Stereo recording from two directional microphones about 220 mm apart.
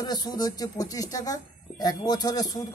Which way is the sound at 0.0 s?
20° left (ahead or behind).